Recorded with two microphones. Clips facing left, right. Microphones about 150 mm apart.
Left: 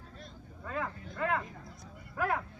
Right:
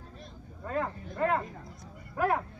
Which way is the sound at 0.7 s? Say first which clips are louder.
Right 5 dB; 35° right (ahead or behind).